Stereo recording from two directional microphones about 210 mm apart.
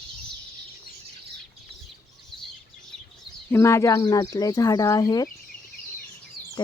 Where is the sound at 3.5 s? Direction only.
15° left (ahead or behind).